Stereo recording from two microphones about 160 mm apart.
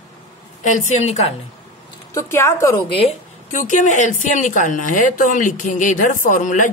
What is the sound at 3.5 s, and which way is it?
Speech, 50° left (ahead or behind).